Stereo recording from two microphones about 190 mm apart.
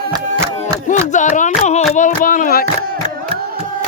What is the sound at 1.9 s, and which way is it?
Speech, 40° left (ahead or behind).